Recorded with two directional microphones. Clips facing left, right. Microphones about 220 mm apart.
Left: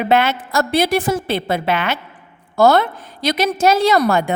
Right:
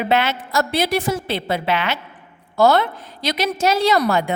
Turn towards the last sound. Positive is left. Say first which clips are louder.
# left 2 dB
turn(degrees=50)  # may be behind; listen again after turning